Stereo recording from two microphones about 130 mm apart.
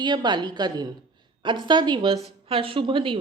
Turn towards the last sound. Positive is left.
turn(degrees=-40)  # may be behind; listen again after turning